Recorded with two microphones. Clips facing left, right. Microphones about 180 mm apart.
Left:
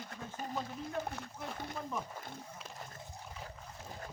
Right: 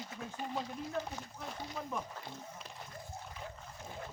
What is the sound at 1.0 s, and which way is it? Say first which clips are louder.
Speech: left 2 dB; 50° left (ahead or behind).